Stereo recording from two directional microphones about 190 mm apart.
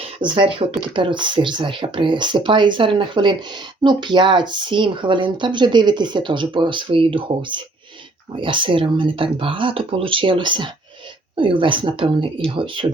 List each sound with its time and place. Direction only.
0.2 s speech: 25° right (ahead or behind)